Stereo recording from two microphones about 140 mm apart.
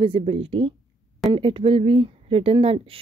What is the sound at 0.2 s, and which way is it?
A woman's voice, 45° right (ahead or behind).